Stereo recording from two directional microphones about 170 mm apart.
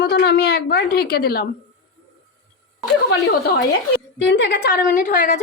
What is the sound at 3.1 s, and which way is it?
Speech, 70° left (ahead or behind).